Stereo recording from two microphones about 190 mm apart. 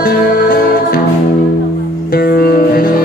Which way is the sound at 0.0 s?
50° left (ahead or behind).